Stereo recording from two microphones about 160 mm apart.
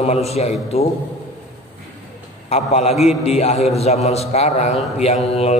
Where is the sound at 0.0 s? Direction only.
40° left (ahead or behind).